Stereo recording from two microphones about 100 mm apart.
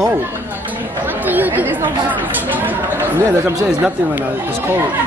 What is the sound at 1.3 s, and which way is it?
Speech, 20° right (ahead or behind).